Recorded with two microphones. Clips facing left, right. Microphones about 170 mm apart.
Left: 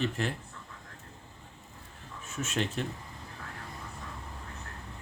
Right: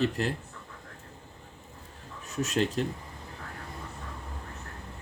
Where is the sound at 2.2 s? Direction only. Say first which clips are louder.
Right 5 dB; 35° right (ahead or behind).